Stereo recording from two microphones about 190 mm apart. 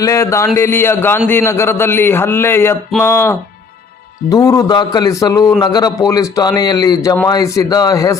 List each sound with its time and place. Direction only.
0.0 s a man's voice: 15° left (ahead or behind)